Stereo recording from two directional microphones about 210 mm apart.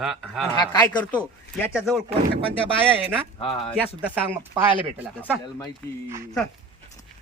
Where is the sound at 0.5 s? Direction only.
20° left (ahead or behind).